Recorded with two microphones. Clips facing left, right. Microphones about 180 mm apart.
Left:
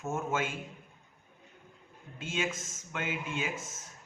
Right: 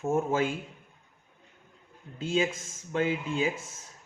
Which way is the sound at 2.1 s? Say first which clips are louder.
Right 7 dB; 35° right (ahead or behind).